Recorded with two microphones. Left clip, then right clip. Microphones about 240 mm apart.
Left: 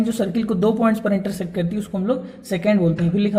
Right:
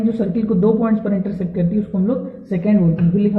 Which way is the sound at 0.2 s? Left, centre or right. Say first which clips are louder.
Right 1 dB; left.